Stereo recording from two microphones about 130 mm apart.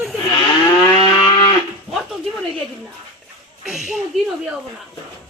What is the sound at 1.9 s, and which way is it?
Speech, centre (ahead or behind).